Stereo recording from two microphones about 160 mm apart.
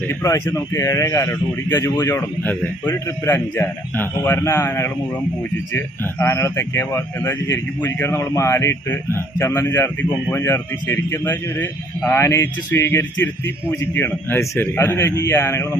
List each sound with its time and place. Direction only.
0.1 s speech: 15° left (ahead or behind)